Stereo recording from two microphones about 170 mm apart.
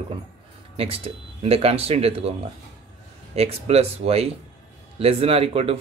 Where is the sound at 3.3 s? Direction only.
35° right (ahead or behind).